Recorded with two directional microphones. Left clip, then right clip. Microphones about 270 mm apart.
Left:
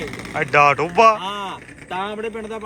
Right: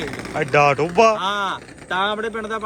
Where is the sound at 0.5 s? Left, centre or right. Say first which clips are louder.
Left 1 dB; centre.